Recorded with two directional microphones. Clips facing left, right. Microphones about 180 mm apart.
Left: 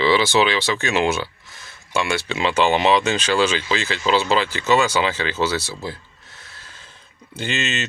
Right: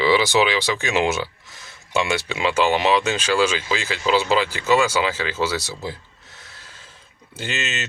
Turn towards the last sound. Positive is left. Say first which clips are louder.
# left 3 dB
turn(degrees=-5)  # may be behind; listen again after turning